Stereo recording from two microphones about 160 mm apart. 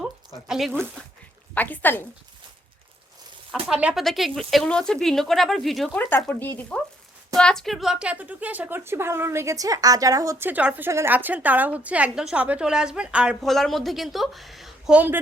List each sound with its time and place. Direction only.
0.4 s speech: 5° right (ahead or behind)
1.5 s speech: 10° left (ahead or behind)
3.5 s speech: 5° right (ahead or behind)
6.0 s a woman's voice: 10° left (ahead or behind); by 15.2 s 10° right (ahead or behind)